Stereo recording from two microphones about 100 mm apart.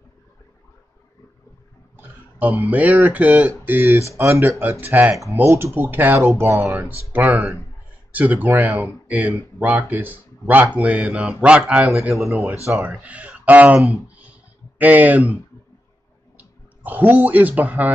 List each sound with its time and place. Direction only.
2.0 s speech: 20° right (ahead or behind)
12.6 s speech: 30° right (ahead or behind)
13.0 s speech: 15° right (ahead or behind)
14.8 s speech: 15° right (ahead or behind)
16.3 s speech: 20° right (ahead or behind)